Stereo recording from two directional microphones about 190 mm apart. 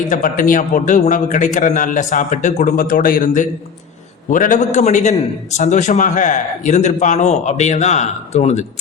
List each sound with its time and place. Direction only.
0.1 s a man's voice: 45° left (ahead or behind)